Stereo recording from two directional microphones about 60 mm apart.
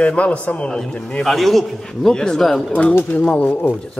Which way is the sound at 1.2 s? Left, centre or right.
Centre.